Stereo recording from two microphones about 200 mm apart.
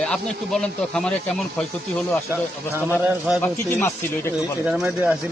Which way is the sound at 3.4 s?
10° left (ahead or behind).